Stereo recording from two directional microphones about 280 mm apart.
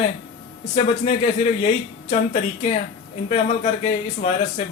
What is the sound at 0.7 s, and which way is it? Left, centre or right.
Speech, left.